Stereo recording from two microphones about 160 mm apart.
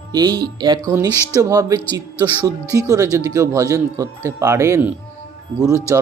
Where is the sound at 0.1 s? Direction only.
25° right (ahead or behind).